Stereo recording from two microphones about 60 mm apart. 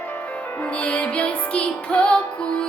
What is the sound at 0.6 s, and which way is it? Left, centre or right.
Music, left.